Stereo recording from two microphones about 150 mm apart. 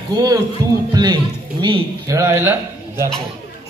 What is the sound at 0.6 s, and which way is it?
Speech, 20° right (ahead or behind).